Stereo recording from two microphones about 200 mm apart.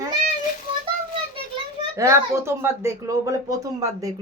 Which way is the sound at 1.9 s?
15° right (ahead or behind).